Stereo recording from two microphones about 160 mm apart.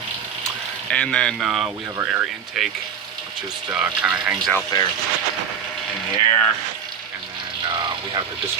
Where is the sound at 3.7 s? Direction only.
10° right (ahead or behind).